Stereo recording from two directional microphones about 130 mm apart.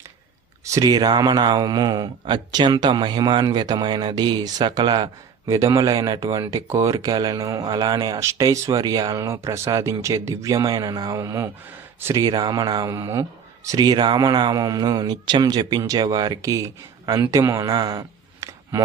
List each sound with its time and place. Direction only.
0.6 s speech: 25° right (ahead or behind)